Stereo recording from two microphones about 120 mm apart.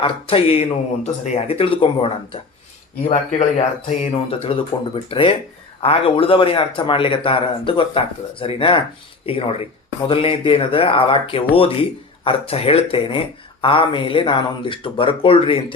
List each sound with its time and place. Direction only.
0.0 s speech: 50° left (ahead or behind)
3.0 s speech: 75° left (ahead or behind)
4.0 s speech: 50° left (ahead or behind)